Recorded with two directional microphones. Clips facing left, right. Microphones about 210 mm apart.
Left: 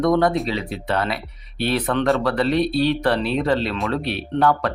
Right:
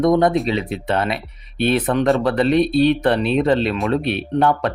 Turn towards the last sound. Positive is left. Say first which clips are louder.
# right 2 dB
turn(degrees=-20)  # may be behind; listen again after turning